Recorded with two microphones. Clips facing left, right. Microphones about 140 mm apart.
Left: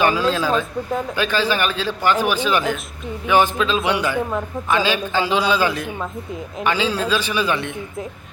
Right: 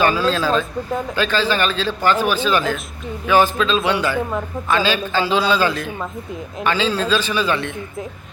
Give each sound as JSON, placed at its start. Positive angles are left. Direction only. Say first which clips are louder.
{"t": 0.0, "sound": "a man's voice", "louder": "right 1 dB", "side_deg": 15}